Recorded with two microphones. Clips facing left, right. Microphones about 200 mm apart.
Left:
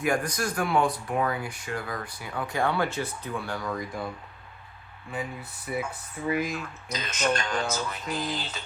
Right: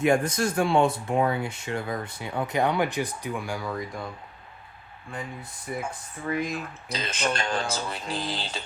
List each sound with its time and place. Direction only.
0.0 s speech: 25° right (ahead or behind); by 4.0 s 5° right (ahead or behind)
5.7 s speech: 5° left (ahead or behind)
6.6 s speech: 30° right (ahead or behind)